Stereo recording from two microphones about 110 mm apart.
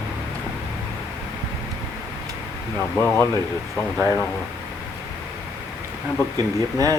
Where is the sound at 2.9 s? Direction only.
20° left (ahead or behind).